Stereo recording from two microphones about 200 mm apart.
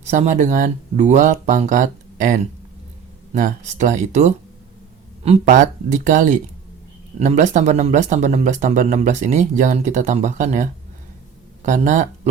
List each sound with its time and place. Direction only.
0.0 s speech: 35° right (ahead or behind)